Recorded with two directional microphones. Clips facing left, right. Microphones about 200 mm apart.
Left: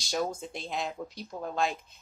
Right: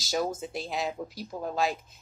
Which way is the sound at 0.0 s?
5° right (ahead or behind).